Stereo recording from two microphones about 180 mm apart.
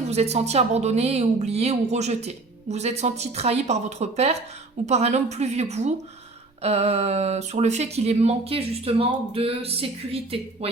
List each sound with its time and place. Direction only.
0.1 s speech: 35° right (ahead or behind)